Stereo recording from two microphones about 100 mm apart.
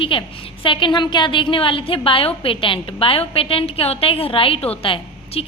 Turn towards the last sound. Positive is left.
turn(degrees=70)  # may be behind; listen again after turning